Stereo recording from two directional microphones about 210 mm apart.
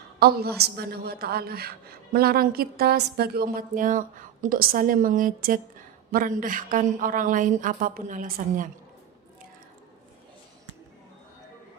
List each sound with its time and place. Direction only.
0.2 s a woman's voice: 45° right (ahead or behind)